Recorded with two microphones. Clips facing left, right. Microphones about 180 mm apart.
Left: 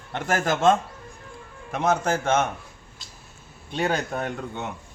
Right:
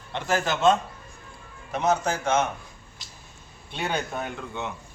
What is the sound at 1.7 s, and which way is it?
Speech, 50° left (ahead or behind).